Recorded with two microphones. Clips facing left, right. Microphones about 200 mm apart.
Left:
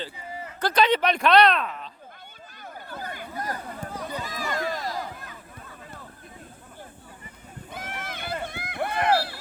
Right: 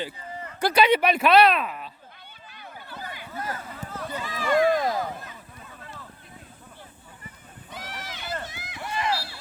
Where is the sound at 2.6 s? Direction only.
45° left (ahead or behind).